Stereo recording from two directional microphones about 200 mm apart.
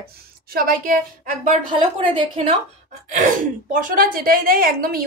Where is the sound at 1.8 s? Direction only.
25° right (ahead or behind).